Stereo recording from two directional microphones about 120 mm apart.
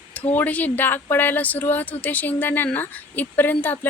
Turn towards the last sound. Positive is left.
turn(degrees=15)  # may be behind; listen again after turning